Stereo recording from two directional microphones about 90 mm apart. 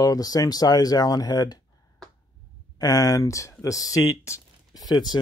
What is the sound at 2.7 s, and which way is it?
Speech, 45° left (ahead or behind).